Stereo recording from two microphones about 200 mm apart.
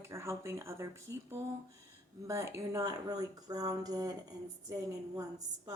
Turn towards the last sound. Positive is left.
turn(degrees=-15)  # may be behind; listen again after turning